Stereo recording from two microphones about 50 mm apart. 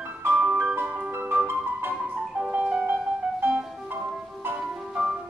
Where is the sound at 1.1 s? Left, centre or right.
Right.